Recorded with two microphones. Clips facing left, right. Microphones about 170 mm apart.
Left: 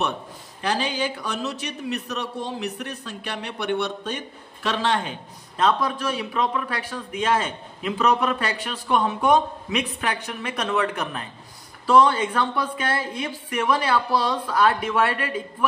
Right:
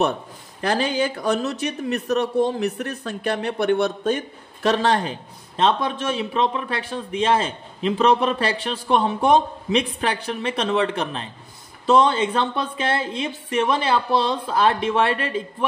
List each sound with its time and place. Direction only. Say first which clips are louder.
0.6 s a man's voice: right 4 dB; 45° right (ahead or behind)
5.6 s a man's voice: right 1 dB; 25° right (ahead or behind)